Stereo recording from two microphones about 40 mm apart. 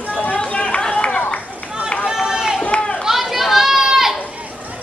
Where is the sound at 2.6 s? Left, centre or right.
Left.